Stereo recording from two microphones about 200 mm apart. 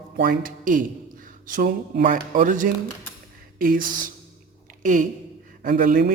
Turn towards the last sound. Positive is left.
turn(degrees=-40)  # may be behind; listen again after turning